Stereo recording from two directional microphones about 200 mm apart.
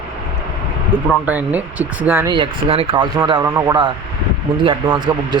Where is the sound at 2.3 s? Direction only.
25° right (ahead or behind).